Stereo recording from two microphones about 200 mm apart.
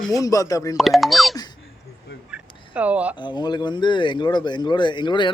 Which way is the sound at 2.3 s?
5° right (ahead or behind).